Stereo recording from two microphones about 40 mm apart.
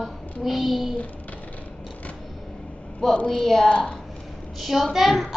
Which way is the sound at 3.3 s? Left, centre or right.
Centre.